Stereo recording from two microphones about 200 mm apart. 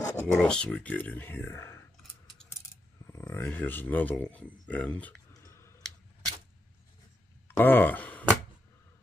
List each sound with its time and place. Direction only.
0.0 s a sound: 15° left (ahead or behind)
0.4 s speech: 5° left (ahead or behind)
3.1 s speech: 15° left (ahead or behind)
5.3 s clicking: 15° left (ahead or behind)
7.4 s speech: 10° left (ahead or behind)